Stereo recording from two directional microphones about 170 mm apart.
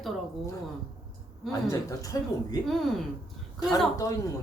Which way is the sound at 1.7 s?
20° left (ahead or behind).